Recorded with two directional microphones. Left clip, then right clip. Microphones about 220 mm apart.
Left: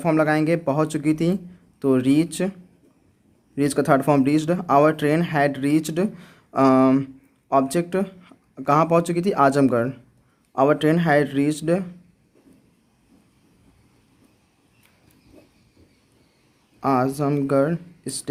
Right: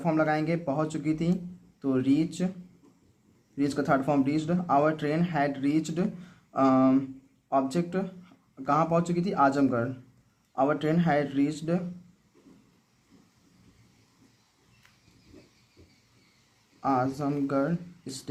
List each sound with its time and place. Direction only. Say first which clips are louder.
0.0 s speech: left 7 dB; 50° left (ahead or behind)
3.6 s speech: left 7 dB; 50° left (ahead or behind)
16.8 s speech: left 6 dB; 45° left (ahead or behind)